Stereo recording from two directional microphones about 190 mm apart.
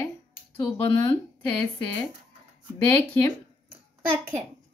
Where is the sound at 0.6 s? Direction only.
25° left (ahead or behind).